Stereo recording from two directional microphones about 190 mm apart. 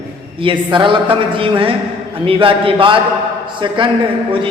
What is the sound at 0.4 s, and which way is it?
A man's voice, 25° right (ahead or behind).